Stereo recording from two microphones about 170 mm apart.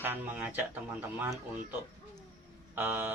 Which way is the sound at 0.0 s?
10° right (ahead or behind).